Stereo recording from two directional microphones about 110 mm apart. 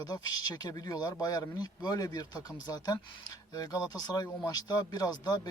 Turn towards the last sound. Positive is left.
turn(degrees=40)  # may be behind; listen again after turning